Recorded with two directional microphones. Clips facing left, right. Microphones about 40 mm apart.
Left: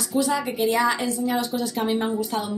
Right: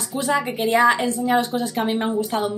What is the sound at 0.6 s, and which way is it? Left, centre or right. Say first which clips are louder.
Speech: right 5 dB; right.